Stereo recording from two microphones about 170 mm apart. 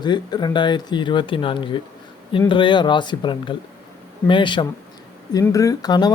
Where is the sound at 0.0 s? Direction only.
25° left (ahead or behind).